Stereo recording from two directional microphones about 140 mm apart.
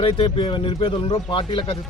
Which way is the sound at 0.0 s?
40° left (ahead or behind).